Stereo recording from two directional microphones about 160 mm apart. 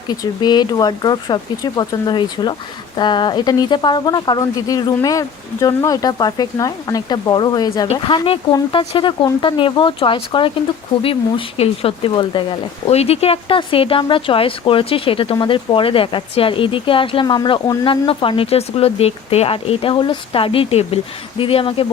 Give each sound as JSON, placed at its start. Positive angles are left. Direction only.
{"t": 0.1, "sound": "speech", "side_deg": 25}